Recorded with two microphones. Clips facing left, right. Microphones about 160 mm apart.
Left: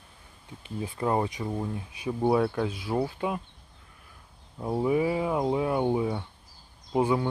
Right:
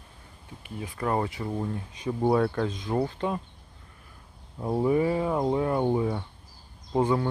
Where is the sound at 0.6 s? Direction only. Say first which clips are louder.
Left 1 dB; 30° left (ahead or behind); by 3.4 s 10° left (ahead or behind).